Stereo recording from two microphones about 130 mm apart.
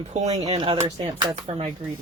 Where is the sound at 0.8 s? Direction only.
40° right (ahead or behind).